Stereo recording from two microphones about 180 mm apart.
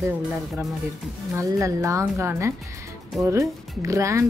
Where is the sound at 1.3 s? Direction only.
15° right (ahead or behind).